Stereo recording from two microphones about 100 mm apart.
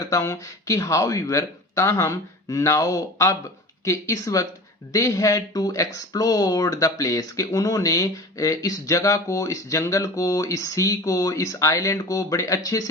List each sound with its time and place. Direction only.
0.0 s speech: 35° left (ahead or behind)